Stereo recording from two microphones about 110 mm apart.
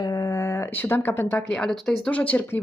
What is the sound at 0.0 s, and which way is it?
Speech, 35° left (ahead or behind).